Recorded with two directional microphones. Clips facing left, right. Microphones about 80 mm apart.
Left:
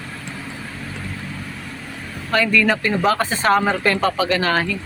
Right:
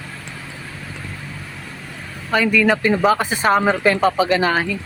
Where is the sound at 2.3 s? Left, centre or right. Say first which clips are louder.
Right 1 dB; centre.